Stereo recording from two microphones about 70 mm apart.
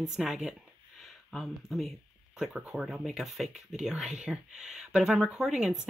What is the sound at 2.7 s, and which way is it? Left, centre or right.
Speech, centre.